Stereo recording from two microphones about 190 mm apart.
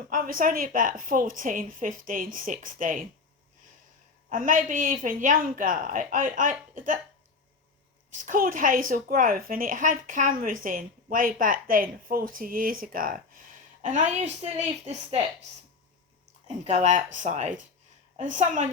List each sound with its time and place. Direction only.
0.0 s a woman's voice: 45° right (ahead or behind)
4.3 s a woman's voice: 45° right (ahead or behind)
8.1 s a woman's voice: 45° right (ahead or behind)
16.5 s a woman's voice: 35° right (ahead or behind)